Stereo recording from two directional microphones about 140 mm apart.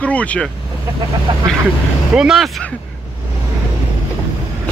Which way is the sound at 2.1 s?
5° right (ahead or behind).